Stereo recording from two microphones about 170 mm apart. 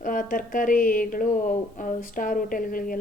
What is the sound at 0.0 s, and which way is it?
Speech, 50° left (ahead or behind).